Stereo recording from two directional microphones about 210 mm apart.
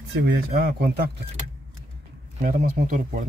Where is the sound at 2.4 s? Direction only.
40° right (ahead or behind).